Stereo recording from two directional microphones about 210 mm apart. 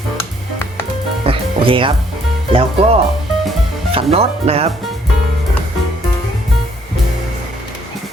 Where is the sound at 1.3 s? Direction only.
25° right (ahead or behind).